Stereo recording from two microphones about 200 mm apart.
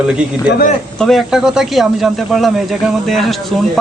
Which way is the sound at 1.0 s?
Centre (ahead or behind).